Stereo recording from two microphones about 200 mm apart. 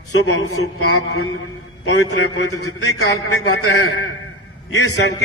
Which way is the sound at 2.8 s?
90° left.